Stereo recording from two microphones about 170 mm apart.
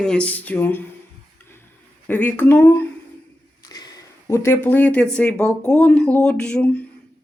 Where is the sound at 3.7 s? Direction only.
20° left (ahead or behind).